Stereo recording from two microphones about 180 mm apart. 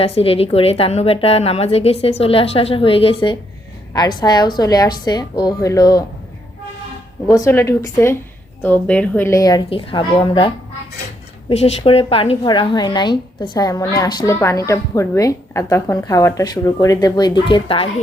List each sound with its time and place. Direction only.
0.0 s a woman's voice: 35° left (ahead or behind)
7.3 s a woman's voice: 15° left (ahead or behind)